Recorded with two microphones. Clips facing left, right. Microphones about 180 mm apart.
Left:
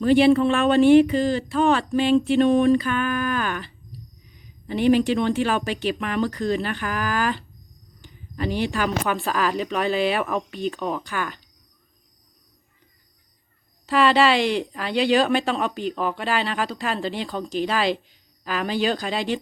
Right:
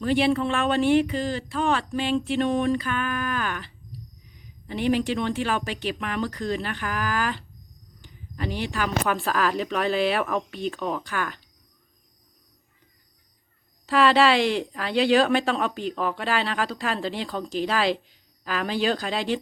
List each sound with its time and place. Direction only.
0.0 s speech: 35° left (ahead or behind)
2.0 s a sound: 45° left (ahead or behind)
2.6 s speech: 30° left (ahead or behind)
5.1 s speech: 30° left (ahead or behind)
8.4 s speech: 30° left (ahead or behind)
9.0 s speech: centre (ahead or behind)
13.8 s speech: centre (ahead or behind)